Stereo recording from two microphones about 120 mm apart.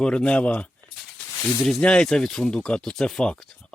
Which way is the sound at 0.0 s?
10° left (ahead or behind).